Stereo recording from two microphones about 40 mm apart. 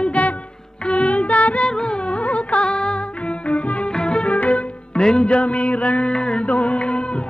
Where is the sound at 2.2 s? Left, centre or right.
Left.